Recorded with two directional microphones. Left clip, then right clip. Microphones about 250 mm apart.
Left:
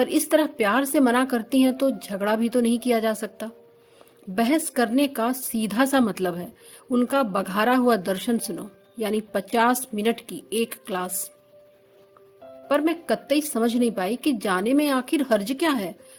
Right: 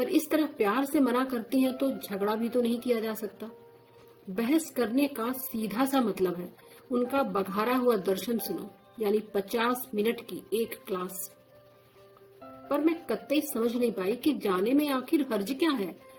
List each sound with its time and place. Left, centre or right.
0.1 s a woman's voice: left
12.6 s a woman's voice: left